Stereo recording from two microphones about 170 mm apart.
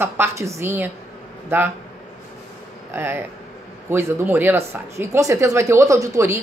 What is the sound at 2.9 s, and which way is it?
A man's voice, 15° right (ahead or behind).